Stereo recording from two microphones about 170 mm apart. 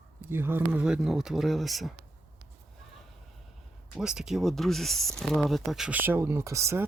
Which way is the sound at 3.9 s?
5° right (ahead or behind).